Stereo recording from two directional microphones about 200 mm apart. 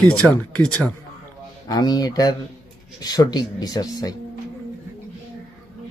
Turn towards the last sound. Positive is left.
turn(degrees=20)  # may be behind; listen again after turning